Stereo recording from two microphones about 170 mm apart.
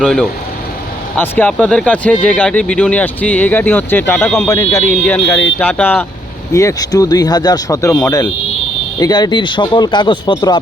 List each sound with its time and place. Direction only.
0.0 s speech: centre (ahead or behind); by 10.6 s 25° left (ahead or behind)